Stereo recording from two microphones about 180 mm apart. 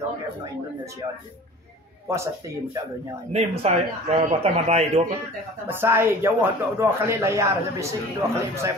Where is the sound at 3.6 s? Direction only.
35° right (ahead or behind).